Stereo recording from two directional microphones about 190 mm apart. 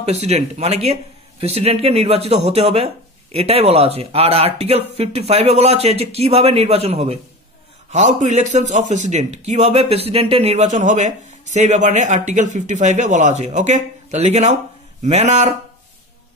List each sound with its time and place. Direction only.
0.0 s a man's voice: 35° right (ahead or behind)